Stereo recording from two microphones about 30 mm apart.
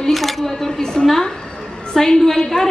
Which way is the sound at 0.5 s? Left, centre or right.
Centre.